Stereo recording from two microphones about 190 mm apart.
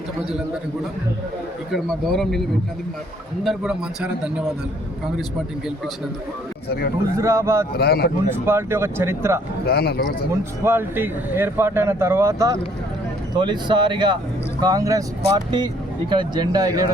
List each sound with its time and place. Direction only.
0.3 s a man's voice: 5° right (ahead or behind)
1.7 s a man's voice: centre (ahead or behind)
6.7 s speech: 55° left (ahead or behind)
7.2 s speech: 15° right (ahead or behind)
7.8 s speech: 55° left (ahead or behind)
8.3 s speech: 15° right (ahead or behind)
9.6 s speech: 55° left (ahead or behind)
10.6 s speech: 10° right (ahead or behind)